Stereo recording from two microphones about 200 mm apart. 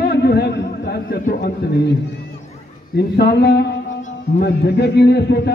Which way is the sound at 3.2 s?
55° left (ahead or behind).